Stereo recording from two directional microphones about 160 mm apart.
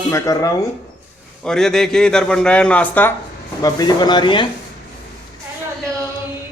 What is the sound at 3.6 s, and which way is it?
Speech, 25° left (ahead or behind).